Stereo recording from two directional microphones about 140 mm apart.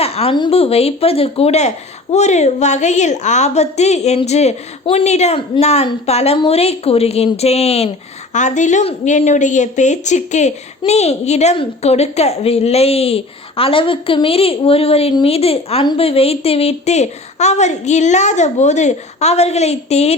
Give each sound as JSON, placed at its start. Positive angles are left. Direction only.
{"t": 0.0, "sound": "a sound", "side_deg": 45}
{"t": 0.3, "sound": "a woman's voice", "side_deg": 40}
{"t": 8.3, "sound": "a woman's voice", "side_deg": 60}